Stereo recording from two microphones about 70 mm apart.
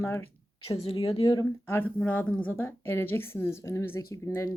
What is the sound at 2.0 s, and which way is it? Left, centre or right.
A woman's voice, centre.